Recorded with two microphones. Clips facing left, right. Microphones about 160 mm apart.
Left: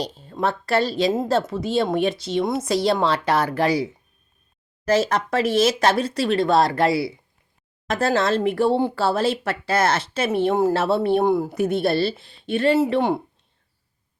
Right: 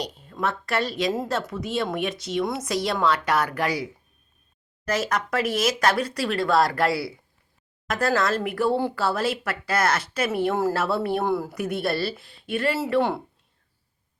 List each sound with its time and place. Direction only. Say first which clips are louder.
0.0 s speech: left 4 dB; 30° left (ahead or behind)
4.9 s speech: left 5 dB; 30° left (ahead or behind)